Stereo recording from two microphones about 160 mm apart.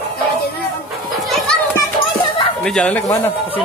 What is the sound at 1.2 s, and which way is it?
Children playing, centre (ahead or behind).